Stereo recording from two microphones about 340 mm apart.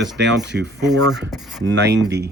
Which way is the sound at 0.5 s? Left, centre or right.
Right.